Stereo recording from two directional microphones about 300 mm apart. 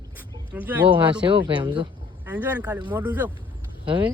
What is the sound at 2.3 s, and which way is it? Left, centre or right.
Speech, centre.